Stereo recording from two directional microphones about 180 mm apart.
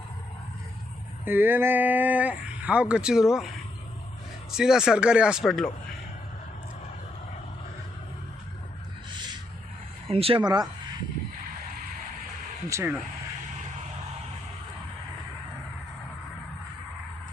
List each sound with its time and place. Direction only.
1.2 s speech: 10° right (ahead or behind)
4.5 s speech: 5° right (ahead or behind)
10.1 s speech: 30° right (ahead or behind)
12.6 s speech: 15° right (ahead or behind)